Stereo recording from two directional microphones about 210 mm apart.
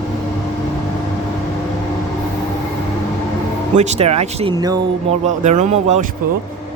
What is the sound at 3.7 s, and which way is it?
Speech, 35° right (ahead or behind).